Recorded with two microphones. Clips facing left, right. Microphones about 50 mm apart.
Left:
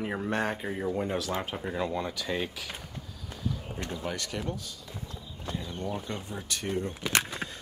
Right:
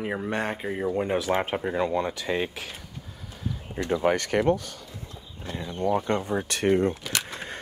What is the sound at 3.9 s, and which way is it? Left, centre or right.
Speech, right.